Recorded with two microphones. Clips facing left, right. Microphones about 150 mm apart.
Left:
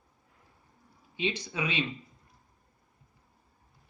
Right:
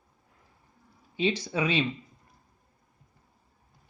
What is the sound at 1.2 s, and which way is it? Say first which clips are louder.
Speech: right 5 dB; 35° right (ahead or behind).